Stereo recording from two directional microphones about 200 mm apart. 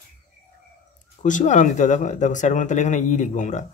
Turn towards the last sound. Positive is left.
turn(degrees=35)  # may be behind; listen again after turning